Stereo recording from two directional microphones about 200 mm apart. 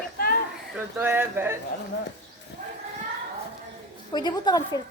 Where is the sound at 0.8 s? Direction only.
10° right (ahead or behind).